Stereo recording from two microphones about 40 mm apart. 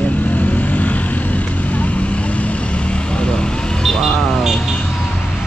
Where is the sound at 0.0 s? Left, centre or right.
Left.